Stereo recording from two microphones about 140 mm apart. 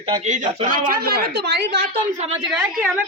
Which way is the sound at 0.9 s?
90° right.